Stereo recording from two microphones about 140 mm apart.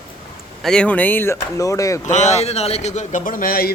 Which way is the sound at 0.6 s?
5° left (ahead or behind).